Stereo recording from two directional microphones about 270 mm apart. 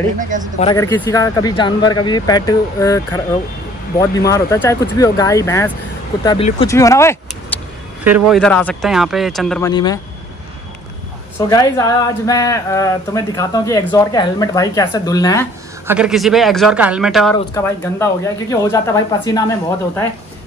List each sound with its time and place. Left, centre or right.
0.2 s speech: right
0.6 s speech: centre
8.0 s speech: centre
9.6 s speech: centre
11.3 s speech: centre
15.9 s speech: centre
17.6 s speech: centre